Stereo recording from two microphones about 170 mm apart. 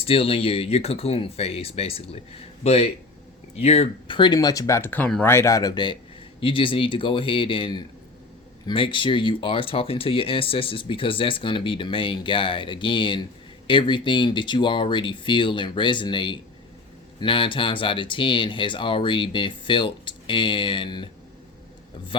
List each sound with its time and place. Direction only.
0.0 s speech: 35° left (ahead or behind)
22.1 s speech: 30° left (ahead or behind)